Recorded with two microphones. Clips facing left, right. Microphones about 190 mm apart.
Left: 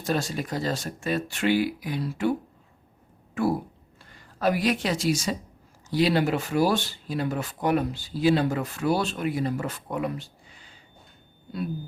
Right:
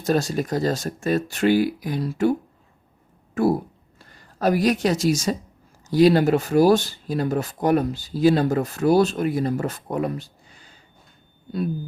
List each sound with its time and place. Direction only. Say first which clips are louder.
0.0 s speech: right 6 dB; 40° right (ahead or behind)
3.4 s speech: right 5 dB; 40° right (ahead or behind)